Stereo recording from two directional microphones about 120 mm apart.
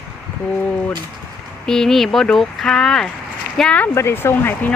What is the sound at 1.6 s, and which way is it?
Speech, 5° left (ahead or behind).